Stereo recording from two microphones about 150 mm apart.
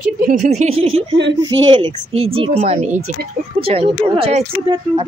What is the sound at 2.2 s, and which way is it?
Speech, 40° right (ahead or behind).